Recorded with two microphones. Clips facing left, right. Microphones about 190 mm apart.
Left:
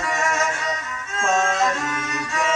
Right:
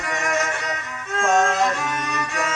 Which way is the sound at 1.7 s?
65° right (ahead or behind).